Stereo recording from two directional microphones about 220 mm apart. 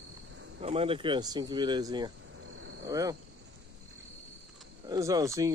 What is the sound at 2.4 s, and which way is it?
Cricket, 70° right (ahead or behind).